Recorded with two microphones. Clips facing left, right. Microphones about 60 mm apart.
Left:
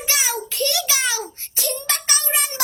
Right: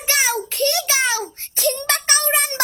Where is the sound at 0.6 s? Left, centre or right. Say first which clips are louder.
Right 3 dB; right.